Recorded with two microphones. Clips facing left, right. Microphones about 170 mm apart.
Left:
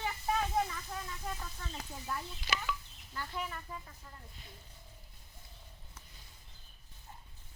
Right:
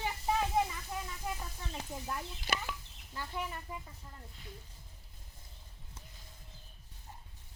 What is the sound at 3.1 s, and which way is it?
Speech, 15° right (ahead or behind).